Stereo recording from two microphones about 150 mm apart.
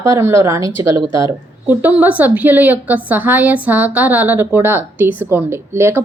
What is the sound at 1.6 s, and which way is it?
A woman's voice, 10° right (ahead or behind).